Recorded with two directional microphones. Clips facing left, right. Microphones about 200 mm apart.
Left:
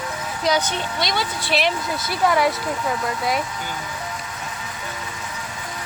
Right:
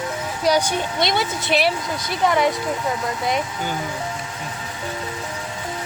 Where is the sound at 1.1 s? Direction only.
20° right (ahead or behind).